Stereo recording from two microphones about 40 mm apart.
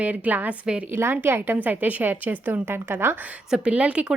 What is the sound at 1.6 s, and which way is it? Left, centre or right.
Speech, right.